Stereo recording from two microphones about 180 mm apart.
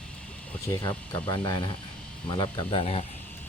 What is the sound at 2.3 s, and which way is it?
Speech, 30° left (ahead or behind).